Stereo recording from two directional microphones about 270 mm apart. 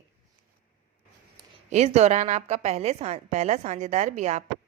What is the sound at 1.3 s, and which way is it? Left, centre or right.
A woman's voice, right.